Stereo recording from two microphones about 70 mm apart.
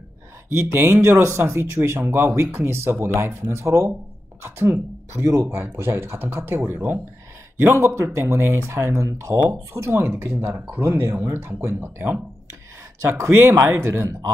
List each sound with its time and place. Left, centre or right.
0.7 s speech: right
7.7 s speech: right
13.0 s speech: right